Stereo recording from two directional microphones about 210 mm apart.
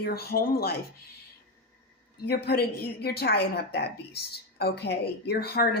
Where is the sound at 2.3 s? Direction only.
50° left (ahead or behind).